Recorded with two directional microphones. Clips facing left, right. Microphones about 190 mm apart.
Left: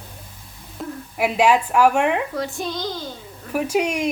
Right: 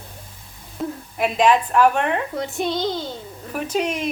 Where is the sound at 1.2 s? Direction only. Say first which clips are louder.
Even; 10° left (ahead or behind).